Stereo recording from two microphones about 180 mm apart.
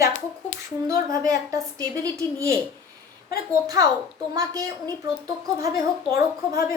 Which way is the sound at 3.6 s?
20° right (ahead or behind).